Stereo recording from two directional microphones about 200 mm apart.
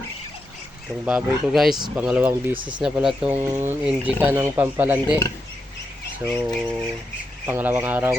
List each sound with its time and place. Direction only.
1.0 s speech: 5° right (ahead or behind)
6.2 s speech: 20° right (ahead or behind)
7.4 s speech: 10° right (ahead or behind)